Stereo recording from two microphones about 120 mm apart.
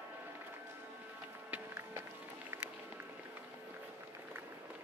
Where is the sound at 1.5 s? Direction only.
20° right (ahead or behind).